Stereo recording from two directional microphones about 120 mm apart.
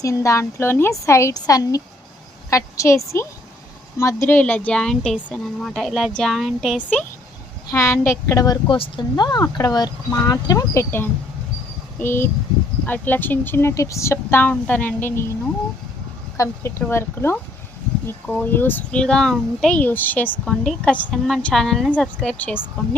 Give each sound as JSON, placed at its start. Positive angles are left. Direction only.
{"t": 0.0, "sound": "a woman's voice", "side_deg": 25}
{"t": 4.4, "sound": "speech", "side_deg": 15}
{"t": 7.7, "sound": "a woman's voice", "side_deg": 20}
{"t": 8.6, "sound": "speech", "side_deg": 40}
{"t": 11.9, "sound": "speech", "side_deg": 20}
{"t": 16.4, "sound": "a woman's voice", "side_deg": 25}
{"t": 20.4, "sound": "speech", "side_deg": 5}